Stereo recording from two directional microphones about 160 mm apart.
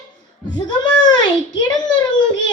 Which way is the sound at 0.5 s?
25° left (ahead or behind).